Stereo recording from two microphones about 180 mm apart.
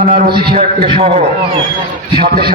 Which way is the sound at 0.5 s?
30° right (ahead or behind).